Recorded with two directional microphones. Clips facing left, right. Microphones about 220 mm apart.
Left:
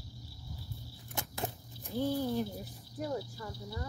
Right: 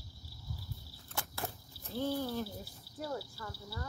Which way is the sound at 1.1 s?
20° left (ahead or behind).